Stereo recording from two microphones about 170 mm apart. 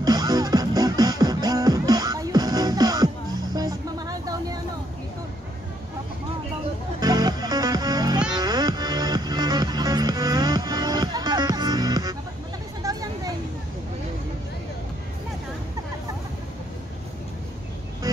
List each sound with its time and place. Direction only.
0.0 s music: 25° right (ahead or behind)
3.5 s vehicle: 20° right (ahead or behind)
7.0 s music: 25° right (ahead or behind)
12.8 s vehicle: 20° right (ahead or behind)